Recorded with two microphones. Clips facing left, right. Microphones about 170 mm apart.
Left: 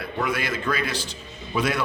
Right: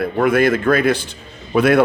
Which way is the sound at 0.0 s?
55° right (ahead or behind).